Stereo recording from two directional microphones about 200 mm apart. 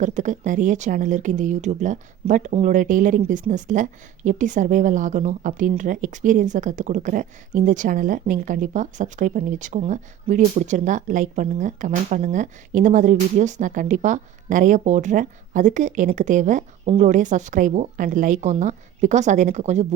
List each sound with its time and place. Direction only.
0.0 s speech: 40° right (ahead or behind)